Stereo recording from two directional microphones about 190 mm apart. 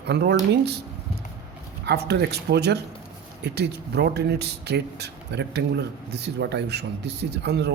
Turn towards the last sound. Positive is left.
turn(degrees=-60)  # may be behind; listen again after turning